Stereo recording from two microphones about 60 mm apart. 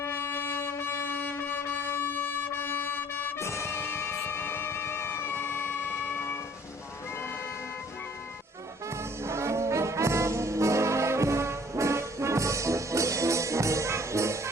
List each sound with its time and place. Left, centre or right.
0.0 s wind instrument: left
3.4 s music: left
9.2 s brass instrument: right